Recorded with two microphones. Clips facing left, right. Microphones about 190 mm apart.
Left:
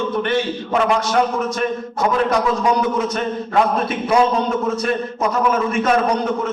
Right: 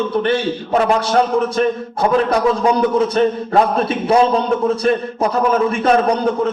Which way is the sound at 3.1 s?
30° right (ahead or behind).